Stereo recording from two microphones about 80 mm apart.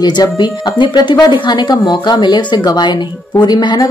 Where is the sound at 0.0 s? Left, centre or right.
Left.